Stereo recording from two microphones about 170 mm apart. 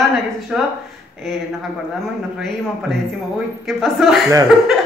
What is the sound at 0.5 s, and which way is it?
Speech, 5° right (ahead or behind).